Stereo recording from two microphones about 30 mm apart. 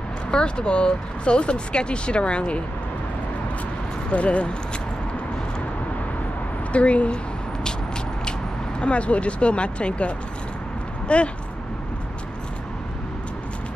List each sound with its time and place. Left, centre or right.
0.3 s speech: left
4.1 s speech: left
6.7 s speech: left
8.8 s speech: left